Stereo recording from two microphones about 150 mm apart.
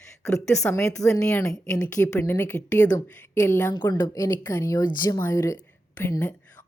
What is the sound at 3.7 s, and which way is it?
Speech, 25° left (ahead or behind).